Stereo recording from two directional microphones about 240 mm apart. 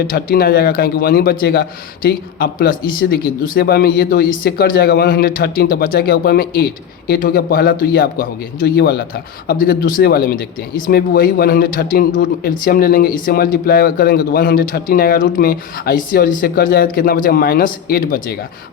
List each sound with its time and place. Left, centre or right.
0.1 s a man's voice: left